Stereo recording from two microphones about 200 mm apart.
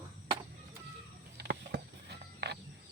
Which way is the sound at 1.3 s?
55° right (ahead or behind).